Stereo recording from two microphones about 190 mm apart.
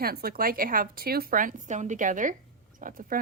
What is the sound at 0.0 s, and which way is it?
Speech, 55° right (ahead or behind).